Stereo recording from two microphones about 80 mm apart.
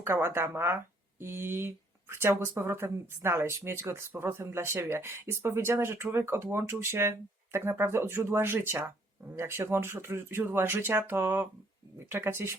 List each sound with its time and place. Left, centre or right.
0.0 s speech: right